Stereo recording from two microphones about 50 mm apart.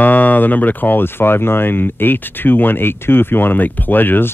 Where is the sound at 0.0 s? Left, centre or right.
Left.